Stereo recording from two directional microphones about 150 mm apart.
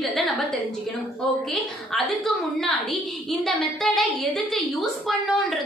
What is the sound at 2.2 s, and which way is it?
A woman's voice, centre (ahead or behind).